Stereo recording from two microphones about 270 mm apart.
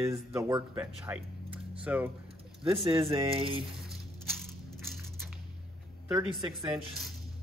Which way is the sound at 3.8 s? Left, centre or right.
Centre.